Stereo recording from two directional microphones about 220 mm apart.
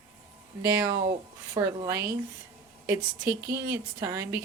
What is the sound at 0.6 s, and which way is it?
Speech, 15° right (ahead or behind).